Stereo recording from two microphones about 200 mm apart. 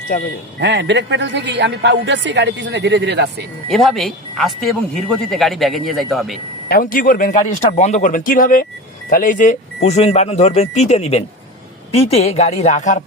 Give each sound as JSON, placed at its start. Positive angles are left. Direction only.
{"t": 0.1, "sound": "speech", "side_deg": 45}
{"t": 0.6, "sound": "speech", "side_deg": -60}
{"t": 3.7, "sound": "speech", "side_deg": 0}
{"t": 6.7, "sound": "speech", "side_deg": 45}